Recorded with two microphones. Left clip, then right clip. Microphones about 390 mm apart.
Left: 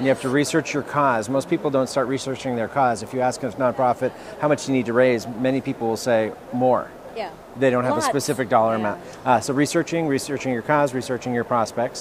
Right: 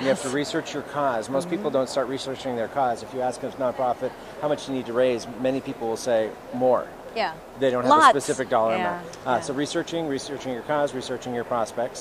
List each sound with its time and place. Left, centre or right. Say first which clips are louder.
0.0 s speech: left 4 dB; left
7.9 s speech: right 7 dB; right
8.2 s speech: left 3 dB; left